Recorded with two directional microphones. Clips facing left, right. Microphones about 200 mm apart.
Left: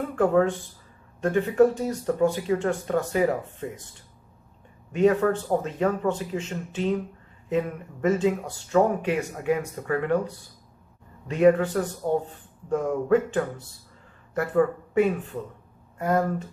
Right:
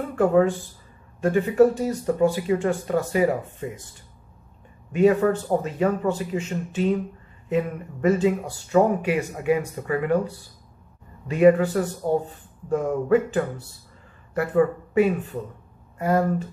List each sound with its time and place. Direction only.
0.1 s speech: 5° right (ahead or behind)
4.9 s speech: 5° right (ahead or behind)
11.2 s speech: 5° right (ahead or behind)